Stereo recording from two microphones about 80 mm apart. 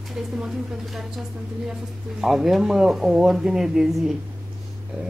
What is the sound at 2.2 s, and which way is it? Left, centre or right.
Speech, centre.